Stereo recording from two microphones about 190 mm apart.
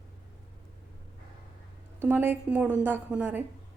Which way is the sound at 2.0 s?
10° right (ahead or behind).